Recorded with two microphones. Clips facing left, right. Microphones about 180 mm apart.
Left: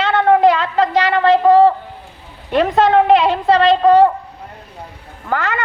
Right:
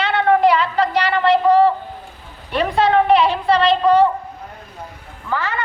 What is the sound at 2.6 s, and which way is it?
Speech, 45° left (ahead or behind).